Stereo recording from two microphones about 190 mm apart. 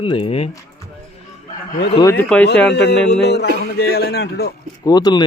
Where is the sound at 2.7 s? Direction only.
60° left (ahead or behind).